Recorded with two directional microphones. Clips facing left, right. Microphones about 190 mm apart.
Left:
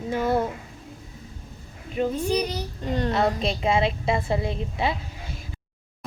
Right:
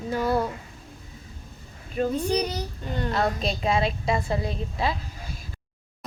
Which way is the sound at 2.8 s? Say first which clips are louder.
Left 3 dB; 35° left (ahead or behind).